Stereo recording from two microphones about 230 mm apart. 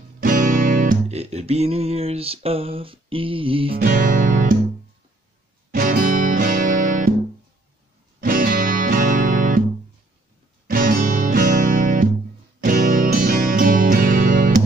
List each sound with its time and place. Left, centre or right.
0.2 s music: right
3.8 s music: right
5.7 s music: right
8.2 s music: right
10.7 s music: right